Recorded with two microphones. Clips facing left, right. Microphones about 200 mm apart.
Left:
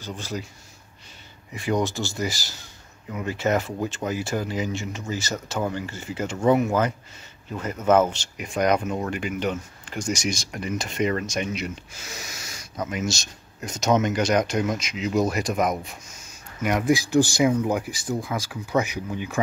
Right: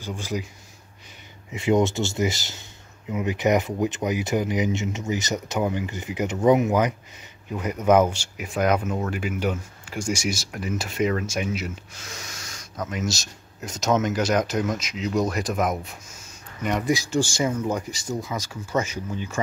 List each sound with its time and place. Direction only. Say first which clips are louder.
0.0 s speech: right 2 dB; 15° right (ahead or behind)
1.5 s speech: right 4 dB; 25° right (ahead or behind); by 19.4 s 15° left (ahead or behind)